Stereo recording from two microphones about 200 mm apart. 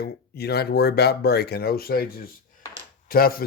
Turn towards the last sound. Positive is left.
turn(degrees=50)  # may be behind; listen again after turning